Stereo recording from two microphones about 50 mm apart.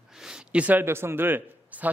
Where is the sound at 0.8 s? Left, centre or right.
Right.